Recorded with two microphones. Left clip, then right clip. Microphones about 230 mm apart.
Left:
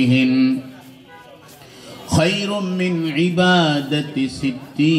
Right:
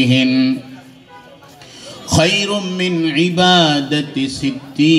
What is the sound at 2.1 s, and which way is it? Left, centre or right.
A man's voice, right.